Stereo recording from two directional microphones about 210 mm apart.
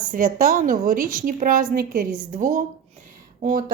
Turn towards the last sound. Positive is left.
turn(degrees=-40)  # may be behind; listen again after turning